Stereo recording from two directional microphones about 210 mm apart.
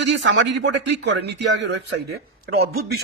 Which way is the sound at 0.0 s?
55° right (ahead or behind).